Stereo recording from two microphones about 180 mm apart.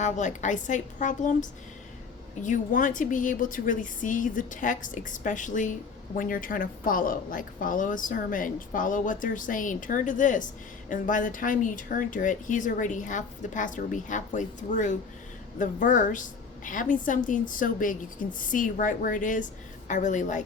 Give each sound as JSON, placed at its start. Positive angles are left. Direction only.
{"t": 0.0, "sound": "a woman's voice", "side_deg": 45}